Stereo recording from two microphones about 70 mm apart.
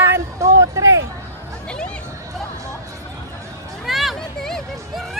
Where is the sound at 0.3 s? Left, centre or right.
Right.